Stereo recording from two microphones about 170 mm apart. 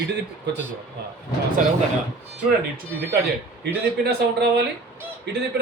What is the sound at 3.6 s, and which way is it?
Speech, 70° right (ahead or behind).